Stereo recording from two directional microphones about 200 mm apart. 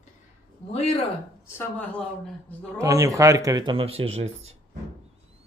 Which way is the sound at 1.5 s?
5° left (ahead or behind).